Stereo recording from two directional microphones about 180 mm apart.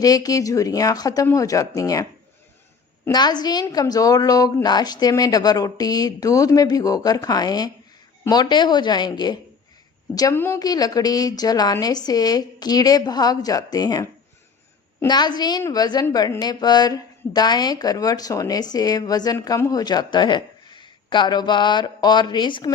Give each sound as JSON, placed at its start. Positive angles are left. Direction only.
{"t": 0.0, "sound": "a woman's voice", "side_deg": 20}